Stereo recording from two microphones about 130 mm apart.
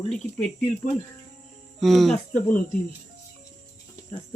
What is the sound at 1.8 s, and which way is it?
Speech, centre (ahead or behind).